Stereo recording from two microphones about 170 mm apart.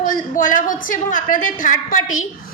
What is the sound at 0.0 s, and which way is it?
A woman's voice, 50° left (ahead or behind).